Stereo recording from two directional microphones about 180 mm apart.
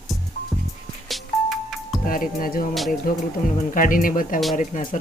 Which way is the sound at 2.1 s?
50° left (ahead or behind).